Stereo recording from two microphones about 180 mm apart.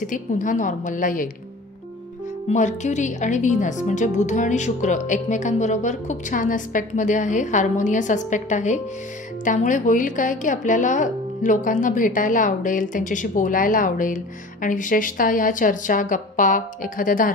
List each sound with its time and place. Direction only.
0.0 s a woman's voice: 45° left (ahead or behind)
2.5 s a woman's voice: 40° left (ahead or behind)